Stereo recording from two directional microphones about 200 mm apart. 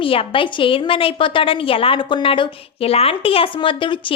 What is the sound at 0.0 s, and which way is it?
A woman's voice, 25° left (ahead or behind).